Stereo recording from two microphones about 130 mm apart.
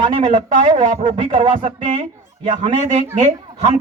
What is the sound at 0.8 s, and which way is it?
Speech, 70° right (ahead or behind).